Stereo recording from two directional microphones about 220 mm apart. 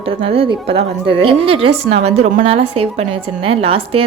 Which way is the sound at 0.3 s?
25° right (ahead or behind).